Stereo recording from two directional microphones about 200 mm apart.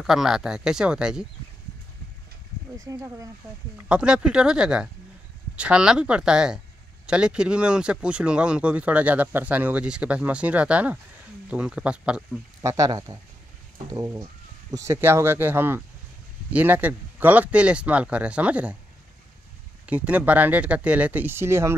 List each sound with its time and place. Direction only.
0.0 s speech: centre (ahead or behind)
2.8 s speech: 15° right (ahead or behind)
3.7 s speech: 5° right (ahead or behind)
12.6 s speech: 15° right (ahead or behind)
19.9 s speech: 5° right (ahead or behind)